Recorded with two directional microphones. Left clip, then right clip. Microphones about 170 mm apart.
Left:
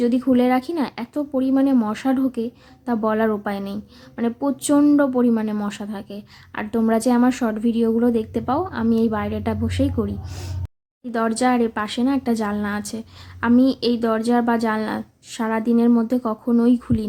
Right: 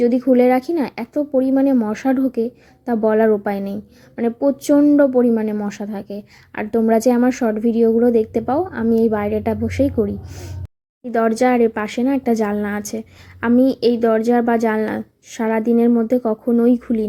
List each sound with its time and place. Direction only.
0.0 s a woman's voice: 10° right (ahead or behind)